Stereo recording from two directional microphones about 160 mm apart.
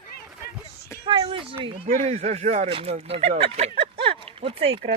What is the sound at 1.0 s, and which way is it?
Speech, 30° right (ahead or behind).